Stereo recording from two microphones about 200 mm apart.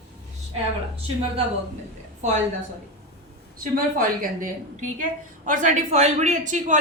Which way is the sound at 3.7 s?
45° right (ahead or behind).